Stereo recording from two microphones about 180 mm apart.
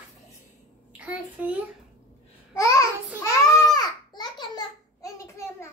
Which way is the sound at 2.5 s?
20° left (ahead or behind).